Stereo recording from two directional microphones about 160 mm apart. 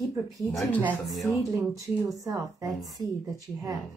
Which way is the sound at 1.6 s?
20° right (ahead or behind).